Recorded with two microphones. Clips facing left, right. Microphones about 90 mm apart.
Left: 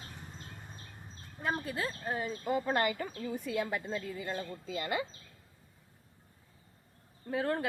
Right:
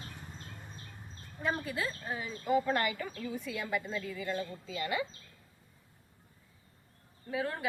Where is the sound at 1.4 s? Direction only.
40° left (ahead or behind).